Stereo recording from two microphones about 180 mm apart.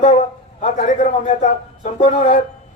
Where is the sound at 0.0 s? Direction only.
40° left (ahead or behind).